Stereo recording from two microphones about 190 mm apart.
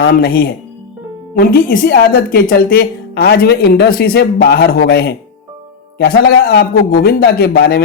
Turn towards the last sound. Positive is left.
turn(degrees=55)  # may be behind; listen again after turning